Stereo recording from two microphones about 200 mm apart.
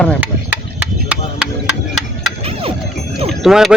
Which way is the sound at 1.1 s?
5° right (ahead or behind).